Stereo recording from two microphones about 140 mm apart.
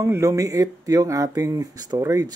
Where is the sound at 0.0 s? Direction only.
20° right (ahead or behind).